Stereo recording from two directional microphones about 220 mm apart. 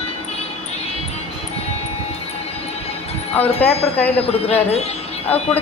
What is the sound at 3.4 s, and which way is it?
Speech, 10° left (ahead or behind).